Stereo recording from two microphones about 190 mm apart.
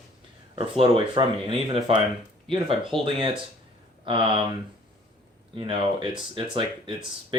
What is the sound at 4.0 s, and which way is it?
Speech, 25° right (ahead or behind).